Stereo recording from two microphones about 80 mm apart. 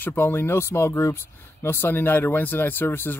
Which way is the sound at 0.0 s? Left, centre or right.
Left.